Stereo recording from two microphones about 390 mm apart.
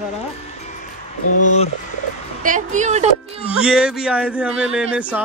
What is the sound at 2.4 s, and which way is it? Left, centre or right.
Speech, centre.